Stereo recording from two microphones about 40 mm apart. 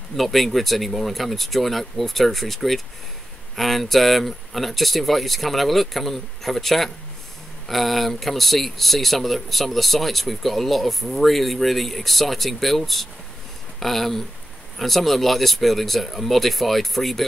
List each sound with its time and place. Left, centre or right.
0.1 s speech: centre